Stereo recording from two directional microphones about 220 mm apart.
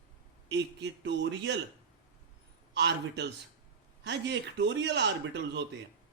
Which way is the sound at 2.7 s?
50° right (ahead or behind).